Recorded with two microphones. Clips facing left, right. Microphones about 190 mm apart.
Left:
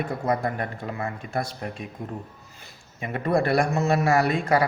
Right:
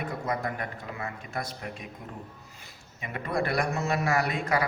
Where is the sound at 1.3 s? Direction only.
30° left (ahead or behind).